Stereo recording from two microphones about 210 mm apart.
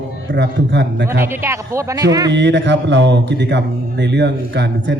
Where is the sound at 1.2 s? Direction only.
10° right (ahead or behind).